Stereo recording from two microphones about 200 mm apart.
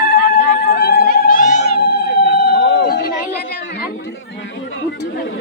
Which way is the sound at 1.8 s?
55° left (ahead or behind).